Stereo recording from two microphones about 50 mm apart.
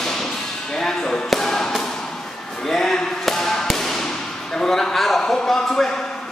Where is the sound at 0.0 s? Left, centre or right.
Centre.